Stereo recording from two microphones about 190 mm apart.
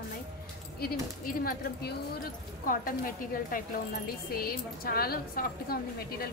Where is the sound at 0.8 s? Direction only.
50° left (ahead or behind).